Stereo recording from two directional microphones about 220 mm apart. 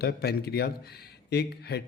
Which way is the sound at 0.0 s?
45° left (ahead or behind).